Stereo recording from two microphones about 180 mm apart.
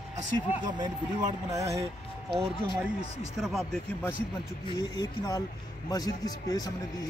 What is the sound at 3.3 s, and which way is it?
Speech, centre (ahead or behind).